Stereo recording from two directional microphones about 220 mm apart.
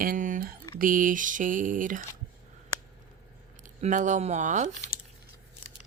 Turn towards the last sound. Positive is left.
turn(degrees=-35)  # may be behind; listen again after turning